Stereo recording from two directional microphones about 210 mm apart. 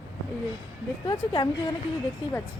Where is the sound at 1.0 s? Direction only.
20° left (ahead or behind).